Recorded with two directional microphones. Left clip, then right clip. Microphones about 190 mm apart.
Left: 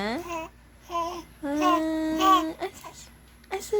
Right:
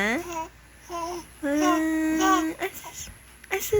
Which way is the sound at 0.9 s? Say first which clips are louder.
Left 2 dB; 15° left (ahead or behind).